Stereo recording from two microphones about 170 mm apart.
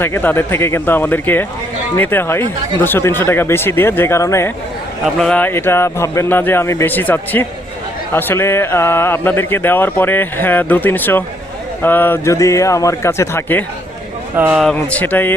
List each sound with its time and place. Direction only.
0.0 s speech: 10° left (ahead or behind)
5.0 s speech: 5° left (ahead or behind)
14.3 s speech: 10° right (ahead or behind)
14.6 s speech: 5° left (ahead or behind)